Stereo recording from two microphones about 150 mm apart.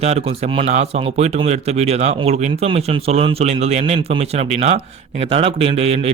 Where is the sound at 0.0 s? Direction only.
45° right (ahead or behind).